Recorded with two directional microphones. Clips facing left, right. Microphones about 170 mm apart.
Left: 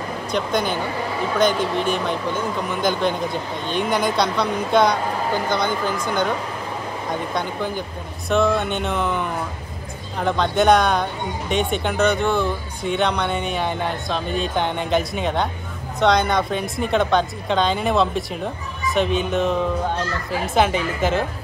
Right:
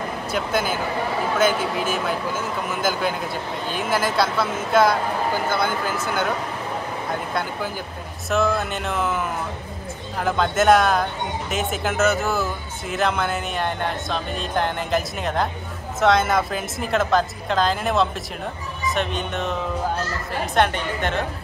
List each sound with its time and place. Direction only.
0.3 s speech: 5° right (ahead or behind)
7.3 s speech: 5° right (ahead or behind)